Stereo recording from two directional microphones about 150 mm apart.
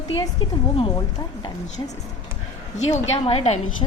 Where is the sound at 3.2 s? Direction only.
40° left (ahead or behind).